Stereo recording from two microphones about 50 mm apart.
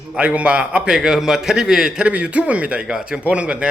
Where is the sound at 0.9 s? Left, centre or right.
Centre; by 2.8 s right.